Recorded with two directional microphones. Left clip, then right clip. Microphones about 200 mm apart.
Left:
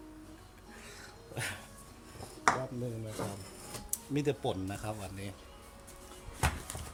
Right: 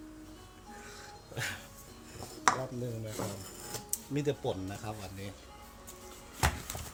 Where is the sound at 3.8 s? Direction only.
25° left (ahead or behind).